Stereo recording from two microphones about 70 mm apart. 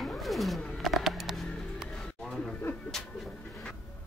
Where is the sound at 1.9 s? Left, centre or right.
Centre.